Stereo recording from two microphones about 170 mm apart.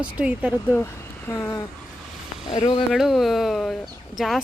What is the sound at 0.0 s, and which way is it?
Speech, 5° right (ahead or behind).